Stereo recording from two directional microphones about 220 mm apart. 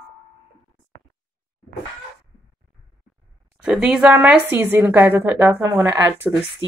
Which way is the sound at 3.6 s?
5° right (ahead or behind).